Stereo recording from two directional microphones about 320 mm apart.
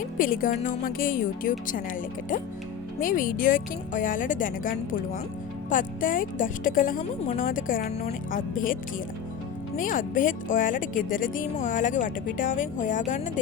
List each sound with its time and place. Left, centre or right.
0.2 s speech: left
3.0 s speech: left